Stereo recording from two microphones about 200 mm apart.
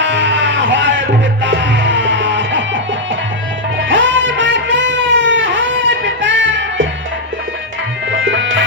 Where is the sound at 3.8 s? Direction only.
70° right (ahead or behind).